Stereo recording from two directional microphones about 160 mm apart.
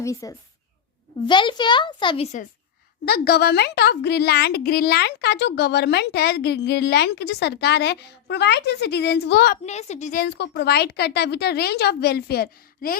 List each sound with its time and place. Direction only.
0.0 s a woman's voice: 20° left (ahead or behind)
2.2 s a woman's voice: 45° left (ahead or behind)
3.1 s speech: 80° left
9.6 s a woman's voice: 45° left (ahead or behind)
10.2 s speech: 90° left; by 13.0 s 70° left (ahead or behind)